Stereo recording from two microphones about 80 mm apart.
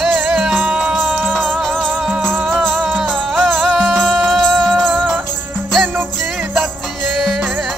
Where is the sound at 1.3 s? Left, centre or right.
Centre.